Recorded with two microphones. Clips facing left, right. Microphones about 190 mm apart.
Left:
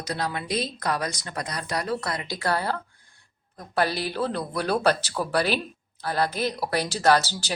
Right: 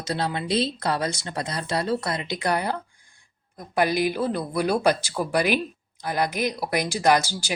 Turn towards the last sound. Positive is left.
turn(degrees=-10)  # may be behind; listen again after turning